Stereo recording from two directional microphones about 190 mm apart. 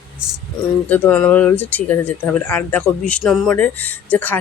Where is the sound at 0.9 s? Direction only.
10° left (ahead or behind).